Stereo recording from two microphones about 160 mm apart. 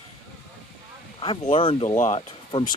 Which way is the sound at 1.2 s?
35° left (ahead or behind).